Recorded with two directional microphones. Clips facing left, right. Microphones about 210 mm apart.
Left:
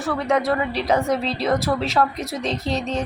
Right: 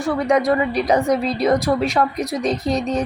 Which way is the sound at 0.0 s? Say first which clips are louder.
Right 4 dB; 15° right (ahead or behind).